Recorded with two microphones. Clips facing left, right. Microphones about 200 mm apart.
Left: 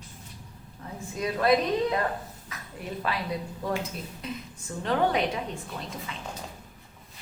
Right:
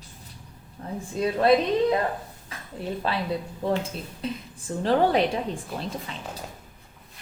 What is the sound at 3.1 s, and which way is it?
A woman's voice, 30° right (ahead or behind).